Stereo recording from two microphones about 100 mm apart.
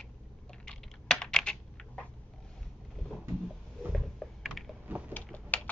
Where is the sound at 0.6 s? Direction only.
5° left (ahead or behind).